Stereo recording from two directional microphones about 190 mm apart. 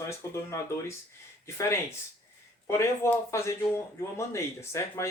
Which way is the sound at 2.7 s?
15° left (ahead or behind).